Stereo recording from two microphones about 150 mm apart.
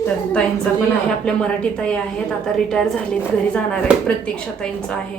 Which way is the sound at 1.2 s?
5° left (ahead or behind).